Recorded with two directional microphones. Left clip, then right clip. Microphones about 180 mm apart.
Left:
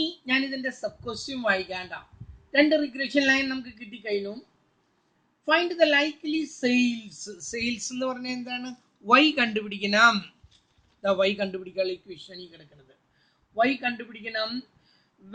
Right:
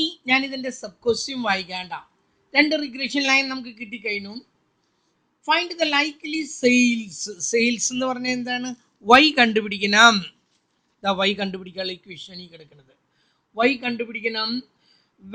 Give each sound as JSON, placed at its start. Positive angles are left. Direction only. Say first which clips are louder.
{"t": 0.0, "sound": "a woman's voice", "louder": "right 5 dB", "side_deg": -55}
{"t": 5.4, "sound": "a woman's voice", "louder": "even", "side_deg": -55}